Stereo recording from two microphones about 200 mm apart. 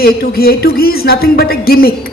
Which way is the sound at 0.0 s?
50° left (ahead or behind).